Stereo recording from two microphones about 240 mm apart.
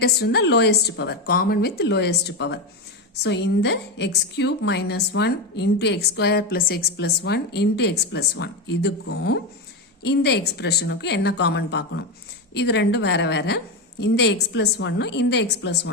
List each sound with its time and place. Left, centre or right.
0.0 s a woman's voice: left